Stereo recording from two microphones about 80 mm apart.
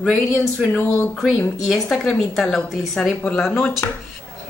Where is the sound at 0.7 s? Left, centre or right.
Left.